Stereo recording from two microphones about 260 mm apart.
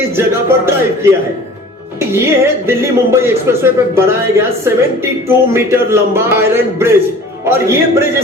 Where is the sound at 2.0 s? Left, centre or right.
Centre.